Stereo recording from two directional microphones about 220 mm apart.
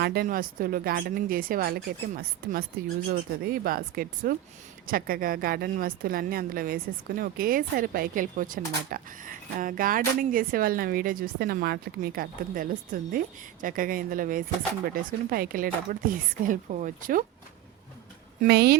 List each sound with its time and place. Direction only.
0.0 s speech: 45° right (ahead or behind)
18.4 s a woman's voice: 45° right (ahead or behind)